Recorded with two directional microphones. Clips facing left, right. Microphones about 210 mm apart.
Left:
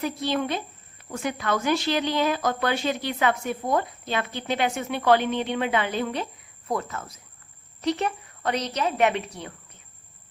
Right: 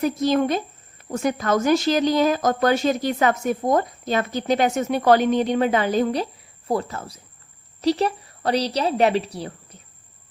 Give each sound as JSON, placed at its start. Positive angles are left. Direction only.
{"t": 0.0, "sound": "a woman's voice", "side_deg": -45}